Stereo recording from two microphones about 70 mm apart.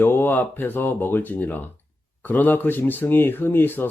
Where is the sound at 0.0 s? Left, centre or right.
Left.